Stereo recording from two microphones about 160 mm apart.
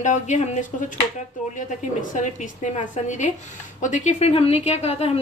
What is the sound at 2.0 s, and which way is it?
A woman's voice, 50° left (ahead or behind).